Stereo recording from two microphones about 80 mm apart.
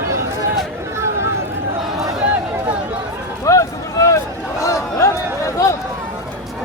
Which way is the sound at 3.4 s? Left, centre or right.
Left.